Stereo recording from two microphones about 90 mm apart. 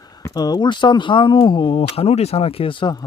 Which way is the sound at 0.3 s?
45° left (ahead or behind).